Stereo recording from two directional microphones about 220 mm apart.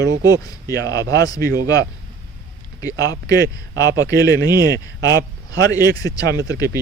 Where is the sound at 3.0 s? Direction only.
15° left (ahead or behind).